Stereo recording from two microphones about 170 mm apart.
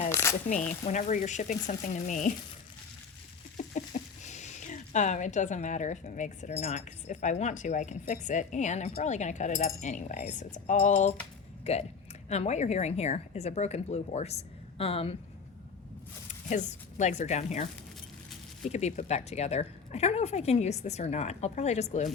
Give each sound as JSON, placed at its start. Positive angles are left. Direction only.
{"t": 0.1, "sound": "a sound", "side_deg": 15}
{"t": 0.9, "sound": "speech", "side_deg": 45}
{"t": 3.8, "sound": "speech", "side_deg": 45}
{"t": 16.5, "sound": "speech", "side_deg": 45}
{"t": 18.7, "sound": "speech", "side_deg": 40}